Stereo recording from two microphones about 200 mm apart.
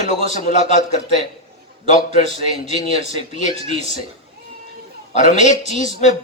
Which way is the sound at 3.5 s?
30° right (ahead or behind).